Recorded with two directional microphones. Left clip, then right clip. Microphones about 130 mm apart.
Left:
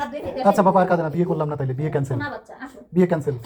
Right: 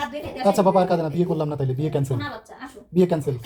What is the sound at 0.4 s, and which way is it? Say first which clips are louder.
Speech: left 2 dB; 30° right (ahead or behind).